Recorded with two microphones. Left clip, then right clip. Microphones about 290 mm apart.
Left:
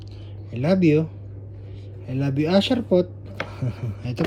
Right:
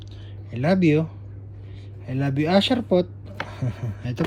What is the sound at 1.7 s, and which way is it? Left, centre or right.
Speech, centre.